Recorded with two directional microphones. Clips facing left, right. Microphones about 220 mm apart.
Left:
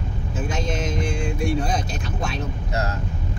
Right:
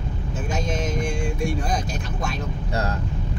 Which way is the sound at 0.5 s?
Centre (ahead or behind).